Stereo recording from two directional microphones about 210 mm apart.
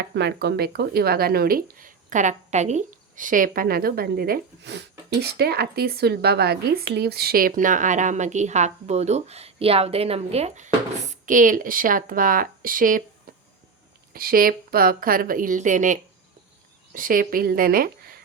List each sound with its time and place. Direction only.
0.0 s speech: 55° right (ahead or behind)
14.1 s speech: 45° right (ahead or behind)